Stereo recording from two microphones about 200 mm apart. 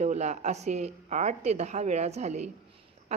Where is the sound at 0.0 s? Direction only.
35° right (ahead or behind).